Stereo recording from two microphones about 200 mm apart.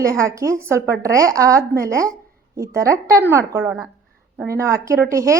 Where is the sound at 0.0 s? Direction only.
15° right (ahead or behind).